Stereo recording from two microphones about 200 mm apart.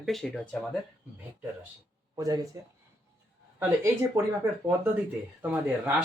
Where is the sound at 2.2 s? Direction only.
20° right (ahead or behind).